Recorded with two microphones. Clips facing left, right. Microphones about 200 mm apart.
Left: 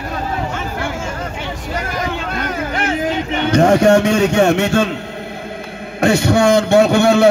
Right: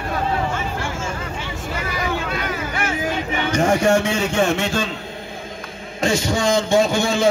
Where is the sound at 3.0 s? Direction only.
65° left (ahead or behind).